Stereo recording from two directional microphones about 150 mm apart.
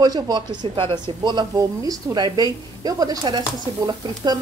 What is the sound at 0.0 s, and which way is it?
A woman's voice, 25° right (ahead or behind).